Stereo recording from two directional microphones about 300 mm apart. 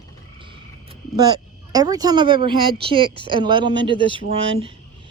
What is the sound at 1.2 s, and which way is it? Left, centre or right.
Speech, centre.